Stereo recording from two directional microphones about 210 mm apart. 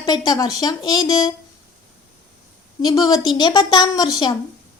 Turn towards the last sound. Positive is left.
turn(degrees=20)  # may be behind; listen again after turning